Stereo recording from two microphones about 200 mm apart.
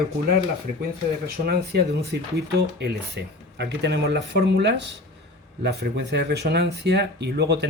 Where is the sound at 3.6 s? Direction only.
60° right (ahead or behind).